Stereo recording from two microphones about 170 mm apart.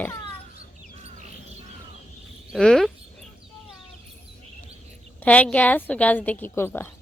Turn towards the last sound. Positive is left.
turn(degrees=10)  # may be behind; listen again after turning